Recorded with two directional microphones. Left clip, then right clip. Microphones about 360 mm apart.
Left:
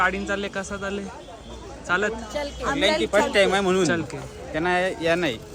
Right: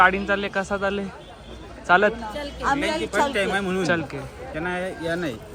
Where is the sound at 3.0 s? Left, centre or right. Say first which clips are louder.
Left 3 dB; left.